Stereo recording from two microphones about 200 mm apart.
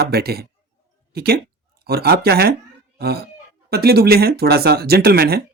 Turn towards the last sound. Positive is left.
turn(degrees=-50)  # may be behind; listen again after turning